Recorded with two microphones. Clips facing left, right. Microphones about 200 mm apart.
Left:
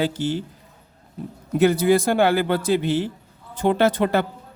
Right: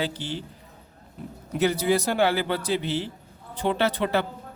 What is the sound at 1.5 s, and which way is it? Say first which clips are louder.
A man's voice: left 6 dB; 50° left (ahead or behind).